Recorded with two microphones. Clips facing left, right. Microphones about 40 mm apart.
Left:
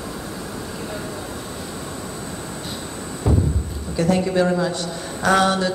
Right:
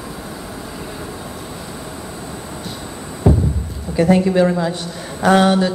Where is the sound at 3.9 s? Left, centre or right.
Right.